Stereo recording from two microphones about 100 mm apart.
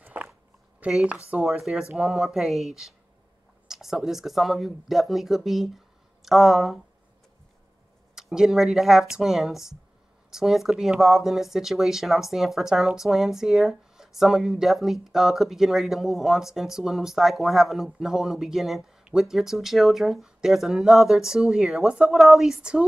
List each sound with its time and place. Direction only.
0.0 s a sound: 15° right (ahead or behind)
0.7 s speech: 10° right (ahead or behind)
8.1 s speech: 5° right (ahead or behind)